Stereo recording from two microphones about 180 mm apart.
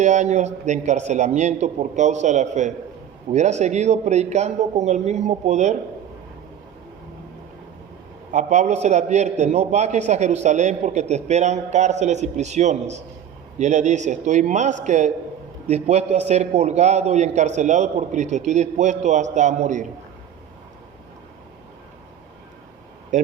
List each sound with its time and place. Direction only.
0.0 s a man's voice: 40° right (ahead or behind)
8.3 s a man's voice: 40° right (ahead or behind)
23.1 s speech: 45° right (ahead or behind)